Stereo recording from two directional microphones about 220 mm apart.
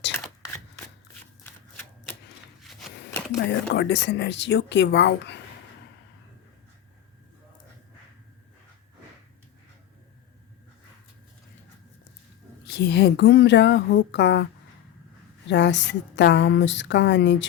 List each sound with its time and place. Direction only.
3.3 s speech: 50° left (ahead or behind)
12.6 s speech: 50° left (ahead or behind)
15.4 s speech: 55° left (ahead or behind)